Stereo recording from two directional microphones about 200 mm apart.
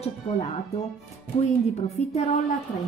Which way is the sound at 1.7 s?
35° left (ahead or behind).